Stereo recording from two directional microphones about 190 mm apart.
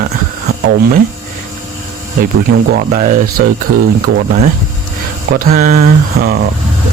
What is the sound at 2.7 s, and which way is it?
Speech, 50° right (ahead or behind).